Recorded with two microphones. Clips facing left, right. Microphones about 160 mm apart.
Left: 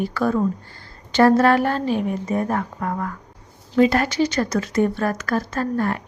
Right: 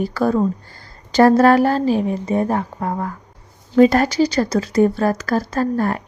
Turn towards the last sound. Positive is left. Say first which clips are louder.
# right 3 dB
turn(degrees=-35)  # may be behind; listen again after turning